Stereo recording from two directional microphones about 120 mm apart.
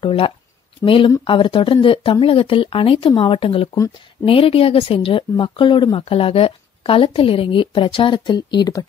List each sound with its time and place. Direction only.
0.0 s speech: 50° left (ahead or behind)